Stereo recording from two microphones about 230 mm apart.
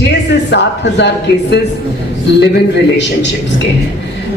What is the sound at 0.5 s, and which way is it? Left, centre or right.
Speech, left.